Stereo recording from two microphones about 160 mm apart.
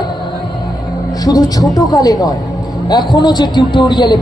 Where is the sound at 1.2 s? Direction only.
25° left (ahead or behind).